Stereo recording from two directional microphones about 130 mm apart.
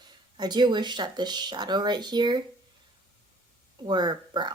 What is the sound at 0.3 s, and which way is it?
Speech, 35° right (ahead or behind).